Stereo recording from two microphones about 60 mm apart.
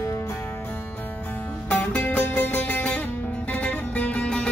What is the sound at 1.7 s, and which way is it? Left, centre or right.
Music, left.